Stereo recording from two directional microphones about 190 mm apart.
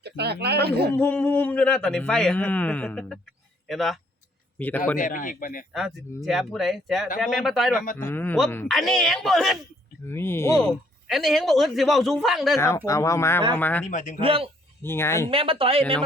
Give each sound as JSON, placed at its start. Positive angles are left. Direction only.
{"t": 0.0, "sound": "speech", "side_deg": -60}
{"t": 0.9, "sound": "a man's voice", "side_deg": 10}
{"t": 4.9, "sound": "a man's voice", "side_deg": 45}
{"t": 5.7, "sound": "speech", "side_deg": 0}
{"t": 7.9, "sound": "speech", "side_deg": 10}
{"t": 8.6, "sound": "speech", "side_deg": 0}
{"t": 10.1, "sound": "speech", "side_deg": 10}
{"t": 11.1, "sound": "speech", "side_deg": 0}
{"t": 12.5, "sound": "speech", "side_deg": 15}
{"t": 13.8, "sound": "speech", "side_deg": 40}
{"t": 14.2, "sound": "speech", "side_deg": -30}
{"t": 14.8, "sound": "speech", "side_deg": 15}
{"t": 15.3, "sound": "speech", "side_deg": -30}